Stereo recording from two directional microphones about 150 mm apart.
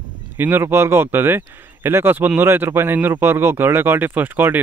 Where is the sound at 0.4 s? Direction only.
15° right (ahead or behind).